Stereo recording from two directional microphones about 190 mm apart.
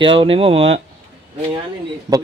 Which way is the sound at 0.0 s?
25° right (ahead or behind).